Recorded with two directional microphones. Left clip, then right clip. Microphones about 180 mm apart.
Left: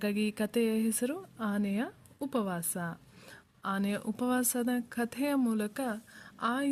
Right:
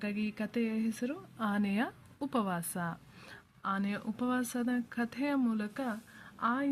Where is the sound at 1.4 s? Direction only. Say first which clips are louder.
Right 2 dB; 25° left (ahead or behind).